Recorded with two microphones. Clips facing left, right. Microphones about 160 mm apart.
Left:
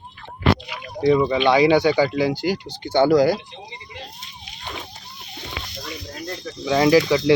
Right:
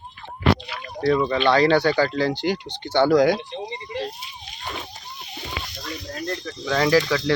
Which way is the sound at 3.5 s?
40° right (ahead or behind).